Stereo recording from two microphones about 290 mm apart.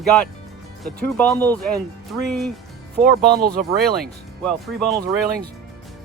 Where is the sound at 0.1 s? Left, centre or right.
Centre.